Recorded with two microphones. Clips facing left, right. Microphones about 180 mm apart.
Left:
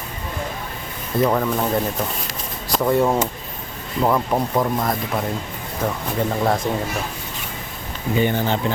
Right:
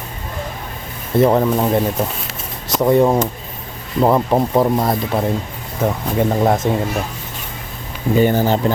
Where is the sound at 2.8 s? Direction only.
20° right (ahead or behind).